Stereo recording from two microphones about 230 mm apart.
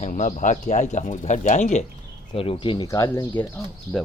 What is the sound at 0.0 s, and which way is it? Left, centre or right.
Speech, left.